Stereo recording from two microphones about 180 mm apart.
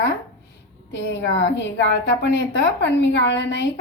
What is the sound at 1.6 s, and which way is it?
A woman's voice, 75° left (ahead or behind).